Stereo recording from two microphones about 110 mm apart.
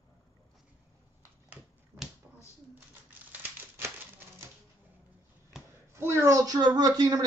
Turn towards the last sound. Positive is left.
turn(degrees=-35)  # may be behind; listen again after turning